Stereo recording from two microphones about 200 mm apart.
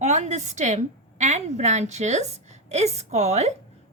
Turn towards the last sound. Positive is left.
turn(degrees=-35)  # may be behind; listen again after turning